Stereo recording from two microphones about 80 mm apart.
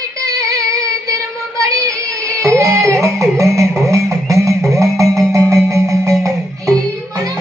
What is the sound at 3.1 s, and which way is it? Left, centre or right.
Music, right.